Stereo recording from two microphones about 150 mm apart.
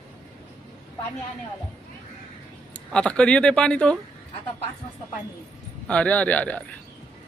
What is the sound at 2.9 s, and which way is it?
Speech, 5° left (ahead or behind).